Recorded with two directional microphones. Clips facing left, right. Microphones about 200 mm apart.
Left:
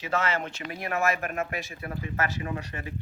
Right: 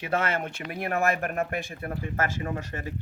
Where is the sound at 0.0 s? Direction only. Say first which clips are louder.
Right 1 dB; 55° right (ahead or behind).